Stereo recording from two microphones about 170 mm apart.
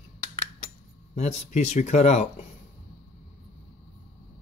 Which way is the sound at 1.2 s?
40° left (ahead or behind).